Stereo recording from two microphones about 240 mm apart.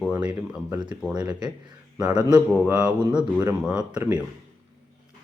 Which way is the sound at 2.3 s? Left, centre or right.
Centre.